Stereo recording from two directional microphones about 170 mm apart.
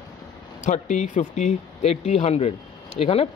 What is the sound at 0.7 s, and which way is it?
Speech, 45° left (ahead or behind).